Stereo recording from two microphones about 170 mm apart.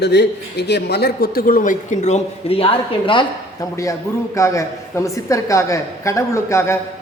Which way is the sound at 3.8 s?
20° left (ahead or behind).